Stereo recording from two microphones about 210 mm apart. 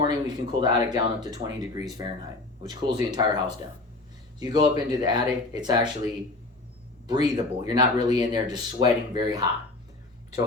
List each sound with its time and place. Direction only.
0.0 s speech: 20° right (ahead or behind)
7.1 s speech: 20° right (ahead or behind)